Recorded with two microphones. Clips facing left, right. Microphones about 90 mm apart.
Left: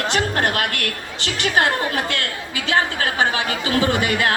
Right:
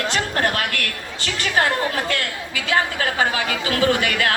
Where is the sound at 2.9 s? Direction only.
35° left (ahead or behind).